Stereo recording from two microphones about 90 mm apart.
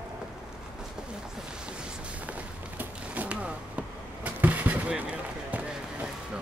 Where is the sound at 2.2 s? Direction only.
15° right (ahead or behind).